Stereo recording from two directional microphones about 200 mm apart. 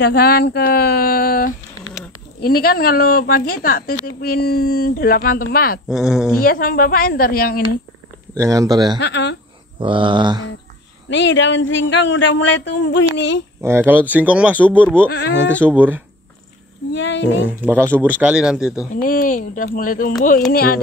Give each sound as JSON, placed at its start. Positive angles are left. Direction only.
{"t": 0.0, "sound": "speech", "side_deg": 50}
{"t": 5.9, "sound": "speech", "side_deg": -5}
{"t": 6.4, "sound": "speech", "side_deg": 45}
{"t": 8.4, "sound": "speech", "side_deg": -15}
{"t": 9.0, "sound": "speech", "side_deg": 65}
{"t": 9.8, "sound": "a sound", "side_deg": -25}
{"t": 11.1, "sound": "speech", "side_deg": 65}
{"t": 13.6, "sound": "speech", "side_deg": -10}
{"t": 15.0, "sound": "speech", "side_deg": 55}
{"t": 15.6, "sound": "speech", "side_deg": -10}
{"t": 16.9, "sound": "a sound", "side_deg": 65}
{"t": 17.6, "sound": "speech", "side_deg": -10}
{"t": 18.9, "sound": "speech", "side_deg": 45}